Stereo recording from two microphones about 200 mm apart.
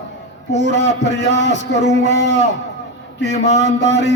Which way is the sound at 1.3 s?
35° right (ahead or behind).